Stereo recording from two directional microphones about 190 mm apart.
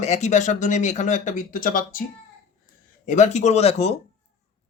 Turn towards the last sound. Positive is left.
turn(degrees=35)  # may be behind; listen again after turning